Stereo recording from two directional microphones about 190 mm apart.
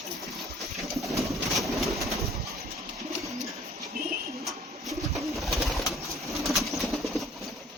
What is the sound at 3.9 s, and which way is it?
Bird, 50° right (ahead or behind).